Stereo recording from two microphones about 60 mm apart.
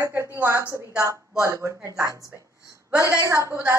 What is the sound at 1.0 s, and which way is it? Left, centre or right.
A woman's voice, right.